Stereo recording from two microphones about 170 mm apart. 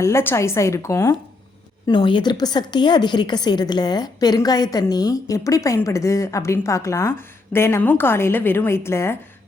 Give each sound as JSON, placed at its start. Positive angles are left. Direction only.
{"t": 0.0, "sound": "a woman's voice", "side_deg": 15}
{"t": 1.9, "sound": "a woman's voice", "side_deg": 25}